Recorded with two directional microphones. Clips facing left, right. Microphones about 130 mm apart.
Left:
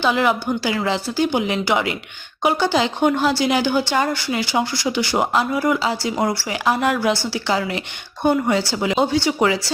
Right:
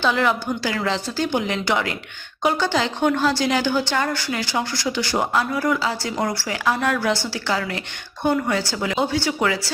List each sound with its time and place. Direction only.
0.0 s speech: 15° left (ahead or behind)